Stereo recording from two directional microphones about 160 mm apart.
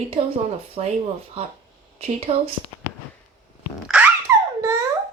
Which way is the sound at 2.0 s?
40° right (ahead or behind).